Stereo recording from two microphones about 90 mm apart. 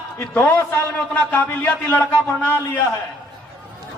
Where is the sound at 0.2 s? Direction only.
25° left (ahead or behind).